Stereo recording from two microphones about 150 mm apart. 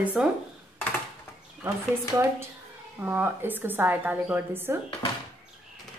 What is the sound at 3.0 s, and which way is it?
A woman's voice, 15° right (ahead or behind).